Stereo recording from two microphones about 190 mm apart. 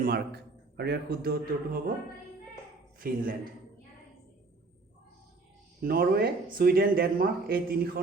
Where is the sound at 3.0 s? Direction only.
50° right (ahead or behind).